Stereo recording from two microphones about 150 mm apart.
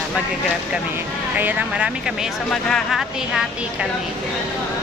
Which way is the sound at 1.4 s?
5° right (ahead or behind).